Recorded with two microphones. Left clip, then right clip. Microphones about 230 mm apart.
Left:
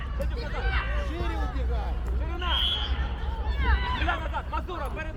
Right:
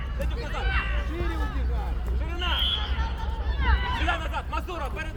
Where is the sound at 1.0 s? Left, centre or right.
Left.